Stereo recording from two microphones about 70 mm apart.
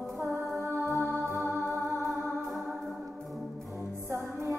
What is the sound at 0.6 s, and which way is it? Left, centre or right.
Music, right.